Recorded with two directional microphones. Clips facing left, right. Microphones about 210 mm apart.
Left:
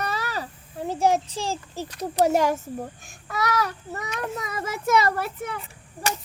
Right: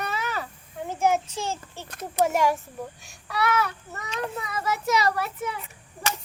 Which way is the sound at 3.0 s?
50° left (ahead or behind).